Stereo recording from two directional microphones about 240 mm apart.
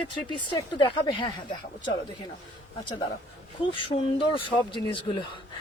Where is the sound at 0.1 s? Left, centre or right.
Centre.